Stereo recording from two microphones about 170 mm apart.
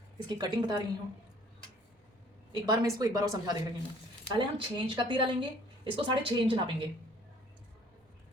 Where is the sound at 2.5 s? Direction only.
20° right (ahead or behind).